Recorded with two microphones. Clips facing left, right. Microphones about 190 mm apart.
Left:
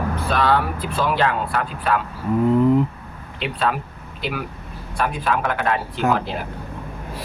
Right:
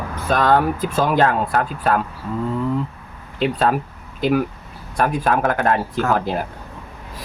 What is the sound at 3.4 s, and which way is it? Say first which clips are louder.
Speech: right 5 dB; 40° right (ahead or behind).